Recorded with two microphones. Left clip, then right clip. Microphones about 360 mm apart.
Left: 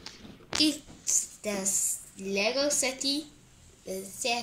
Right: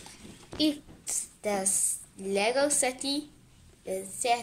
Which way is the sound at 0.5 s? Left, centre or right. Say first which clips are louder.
Left 2 dB; left.